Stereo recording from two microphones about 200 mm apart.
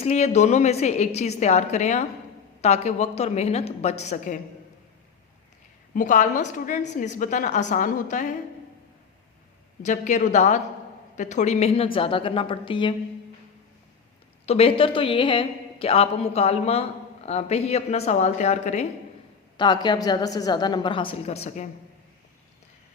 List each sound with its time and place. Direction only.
0.0 s a woman's voice: 30° left (ahead or behind)
5.9 s a woman's voice: 40° left (ahead or behind)
9.8 s a woman's voice: 35° left (ahead or behind)
14.4 s a woman's voice: 30° left (ahead or behind)
19.5 s a woman's voice: 20° left (ahead or behind)